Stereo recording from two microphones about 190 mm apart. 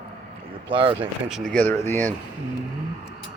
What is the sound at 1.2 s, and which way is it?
Speech, centre (ahead or behind).